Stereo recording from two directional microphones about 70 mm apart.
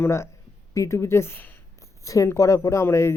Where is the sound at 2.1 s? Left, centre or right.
Left.